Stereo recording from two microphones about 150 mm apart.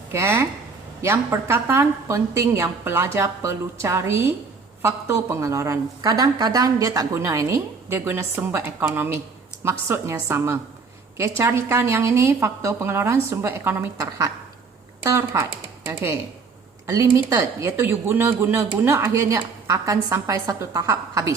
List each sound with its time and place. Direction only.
0.1 s a woman's voice: 15° right (ahead or behind)
16.8 s speech: 20° right (ahead or behind)